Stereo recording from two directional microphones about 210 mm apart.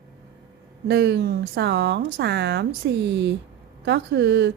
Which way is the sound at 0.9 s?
50° right (ahead or behind).